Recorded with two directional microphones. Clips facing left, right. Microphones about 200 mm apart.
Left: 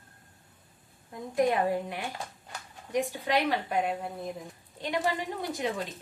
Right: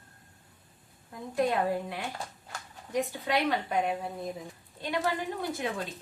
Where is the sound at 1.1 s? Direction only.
20° left (ahead or behind).